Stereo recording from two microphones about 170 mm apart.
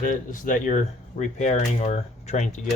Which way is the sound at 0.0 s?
50° left (ahead or behind).